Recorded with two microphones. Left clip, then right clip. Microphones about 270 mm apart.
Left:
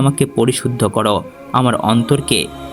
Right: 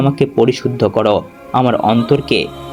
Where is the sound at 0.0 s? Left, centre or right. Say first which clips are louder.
Right 3 dB; left.